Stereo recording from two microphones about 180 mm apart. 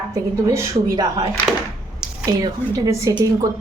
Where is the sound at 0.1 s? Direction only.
15° right (ahead or behind).